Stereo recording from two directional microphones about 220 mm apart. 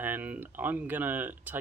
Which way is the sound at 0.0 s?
10° right (ahead or behind).